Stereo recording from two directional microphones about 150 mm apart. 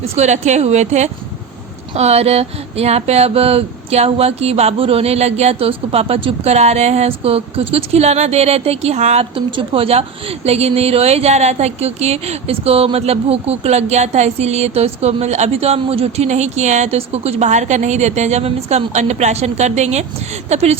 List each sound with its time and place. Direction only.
0.0 s speech: 50° right (ahead or behind)